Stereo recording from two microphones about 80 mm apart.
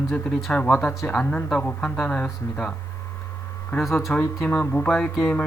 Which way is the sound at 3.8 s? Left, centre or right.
Centre.